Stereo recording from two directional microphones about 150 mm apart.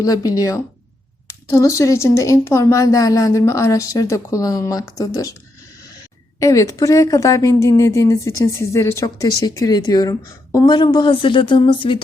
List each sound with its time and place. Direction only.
0.0 s speech: 25° left (ahead or behind)
6.4 s speech: 20° left (ahead or behind)